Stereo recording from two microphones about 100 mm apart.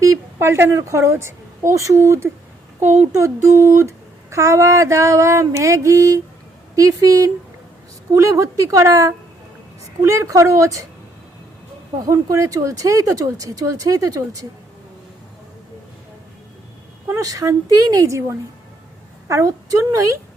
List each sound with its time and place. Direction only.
0.0 s a woman's voice: 30° right (ahead or behind)
12.0 s a child's voice: 35° right (ahead or behind)
17.2 s a child's voice: 35° right (ahead or behind)